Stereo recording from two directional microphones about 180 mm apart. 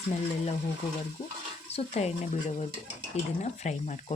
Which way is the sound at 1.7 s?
35° left (ahead or behind).